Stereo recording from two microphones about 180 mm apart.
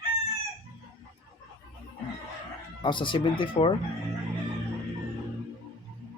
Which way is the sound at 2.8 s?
25° left (ahead or behind).